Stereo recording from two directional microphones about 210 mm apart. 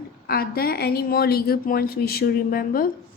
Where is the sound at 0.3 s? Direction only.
45° left (ahead or behind).